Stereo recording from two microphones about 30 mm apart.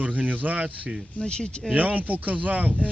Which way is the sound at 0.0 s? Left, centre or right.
Right.